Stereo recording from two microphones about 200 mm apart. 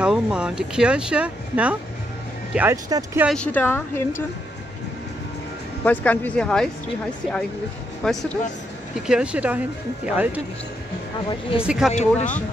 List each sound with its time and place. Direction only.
0.0 s speech: 5° right (ahead or behind)
3.3 s speech: 5° left (ahead or behind)
5.9 s speech: 5° left (ahead or behind)
8.0 s speech: centre (ahead or behind)
11.6 s speech: 5° right (ahead or behind)
11.9 s speech: 35° left (ahead or behind)